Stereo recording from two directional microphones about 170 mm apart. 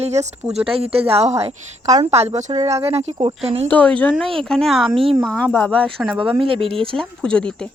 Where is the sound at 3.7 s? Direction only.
10° left (ahead or behind).